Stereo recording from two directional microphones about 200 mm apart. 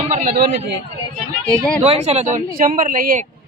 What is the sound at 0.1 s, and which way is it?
Speech, 40° right (ahead or behind).